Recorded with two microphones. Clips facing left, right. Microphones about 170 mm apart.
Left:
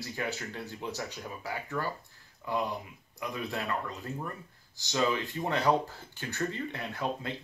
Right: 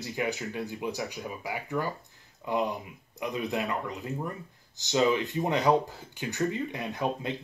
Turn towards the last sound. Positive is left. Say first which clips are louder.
# right 3 dB
turn(degrees=-20)  # may be behind; listen again after turning